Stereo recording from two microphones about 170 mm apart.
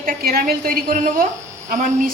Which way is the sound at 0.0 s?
60° right (ahead or behind).